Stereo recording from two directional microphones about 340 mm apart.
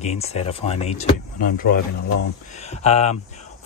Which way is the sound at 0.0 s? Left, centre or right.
Centre.